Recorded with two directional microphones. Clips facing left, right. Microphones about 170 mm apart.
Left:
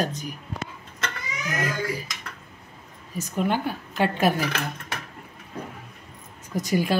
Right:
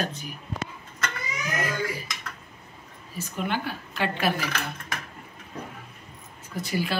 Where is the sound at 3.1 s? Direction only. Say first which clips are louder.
Left 4 dB; 40° left (ahead or behind).